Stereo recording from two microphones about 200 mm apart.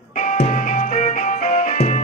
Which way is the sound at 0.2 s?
35° left (ahead or behind).